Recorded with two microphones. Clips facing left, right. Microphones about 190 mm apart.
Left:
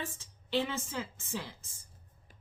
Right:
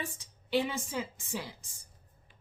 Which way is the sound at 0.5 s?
15° right (ahead or behind).